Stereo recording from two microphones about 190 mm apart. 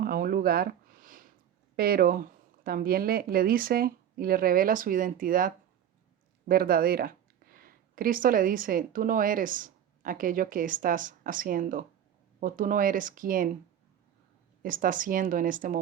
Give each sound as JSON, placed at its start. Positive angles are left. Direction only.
{"t": 0.0, "sound": "a sound", "side_deg": -50}
{"t": 1.7, "sound": "speech", "side_deg": -50}
{"t": 14.6, "sound": "speech", "side_deg": -45}